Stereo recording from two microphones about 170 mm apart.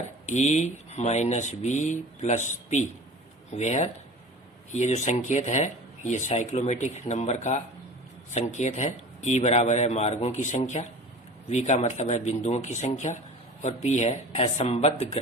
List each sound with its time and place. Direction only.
0.3 s a man's voice: 40° left (ahead or behind)